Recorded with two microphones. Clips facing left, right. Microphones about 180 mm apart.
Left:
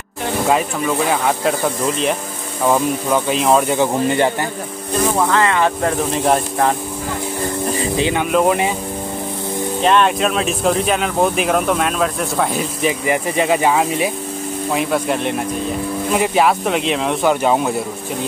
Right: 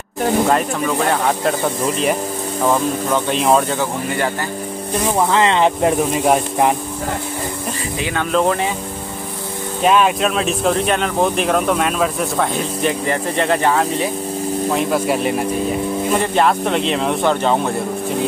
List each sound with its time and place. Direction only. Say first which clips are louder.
0.5 s speech: even; 5° left (ahead or behind)
2.6 s speech: left 1 dB; 5° left (ahead or behind)
3.6 s speech: left 5 dB; 20° left (ahead or behind)
5.3 s speech: right 1 dB; 20° right (ahead or behind)
6.1 s speech: right 1 dB; 5° right (ahead or behind)
8.0 s speech: left 1 dB; 20° left (ahead or behind)
9.8 s speech: right 1 dB; 5° right (ahead or behind); by 14.1 s 10° left (ahead or behind)
14.7 s speech: left 1 dB; centre (ahead or behind)